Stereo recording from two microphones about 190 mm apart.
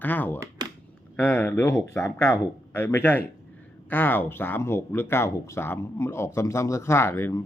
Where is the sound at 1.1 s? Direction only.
10° left (ahead or behind).